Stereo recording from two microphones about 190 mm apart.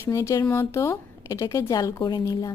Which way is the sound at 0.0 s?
15° left (ahead or behind).